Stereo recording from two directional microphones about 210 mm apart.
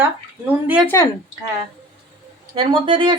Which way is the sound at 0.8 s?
15° left (ahead or behind).